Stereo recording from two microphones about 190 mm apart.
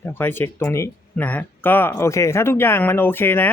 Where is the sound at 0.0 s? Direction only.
10° left (ahead or behind).